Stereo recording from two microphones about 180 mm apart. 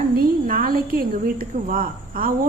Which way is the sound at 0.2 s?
50° right (ahead or behind).